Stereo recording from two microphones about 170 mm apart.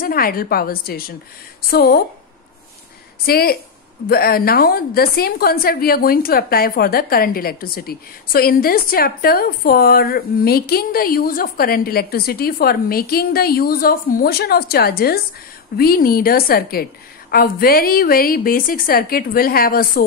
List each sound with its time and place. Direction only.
0.0 s a woman's voice: 60° left (ahead or behind)
3.3 s a woman's voice: 65° left (ahead or behind)